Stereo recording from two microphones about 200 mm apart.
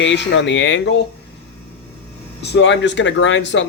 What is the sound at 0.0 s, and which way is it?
Speech, 65° left (ahead or behind).